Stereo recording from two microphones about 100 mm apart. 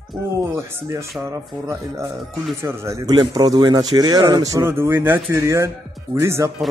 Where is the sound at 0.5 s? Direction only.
25° right (ahead or behind).